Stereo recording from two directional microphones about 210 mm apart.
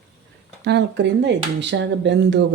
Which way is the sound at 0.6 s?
55° right (ahead or behind).